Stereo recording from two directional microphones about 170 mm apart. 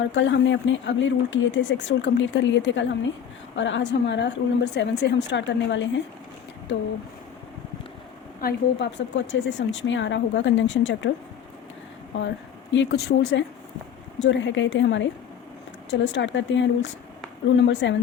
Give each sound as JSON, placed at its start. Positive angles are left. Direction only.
{"t": 0.1, "sound": "speech", "side_deg": 90}
{"t": 8.4, "sound": "speech", "side_deg": 75}
{"t": 12.1, "sound": "speech", "side_deg": 90}